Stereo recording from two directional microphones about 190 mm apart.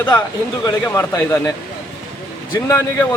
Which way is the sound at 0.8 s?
10° left (ahead or behind).